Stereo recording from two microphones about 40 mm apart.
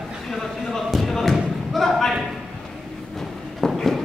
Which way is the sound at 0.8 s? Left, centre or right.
Centre.